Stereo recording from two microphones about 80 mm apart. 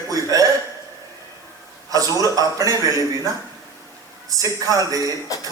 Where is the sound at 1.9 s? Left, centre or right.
Right.